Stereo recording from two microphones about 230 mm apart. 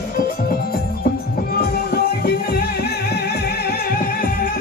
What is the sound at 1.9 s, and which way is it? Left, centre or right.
Music, left.